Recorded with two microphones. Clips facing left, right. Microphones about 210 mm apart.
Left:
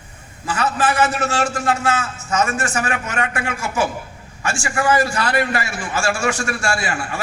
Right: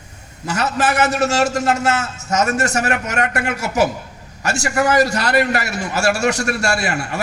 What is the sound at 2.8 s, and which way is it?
Speech, 65° right (ahead or behind).